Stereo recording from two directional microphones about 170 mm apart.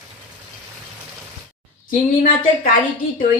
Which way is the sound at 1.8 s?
55° left (ahead or behind).